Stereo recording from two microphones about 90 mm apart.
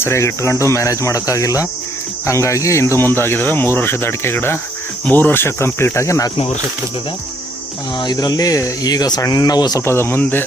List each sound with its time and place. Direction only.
0.0 s speech: 30° left (ahead or behind)
7.9 s speech: 50° left (ahead or behind)
9.8 s speech: 30° left (ahead or behind)